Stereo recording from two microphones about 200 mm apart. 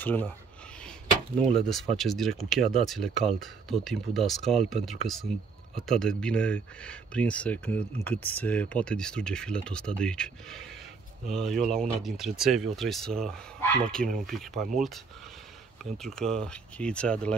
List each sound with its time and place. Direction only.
0.0 s speech: 10° left (ahead or behind)
1.4 s speech: 5° left (ahead or behind)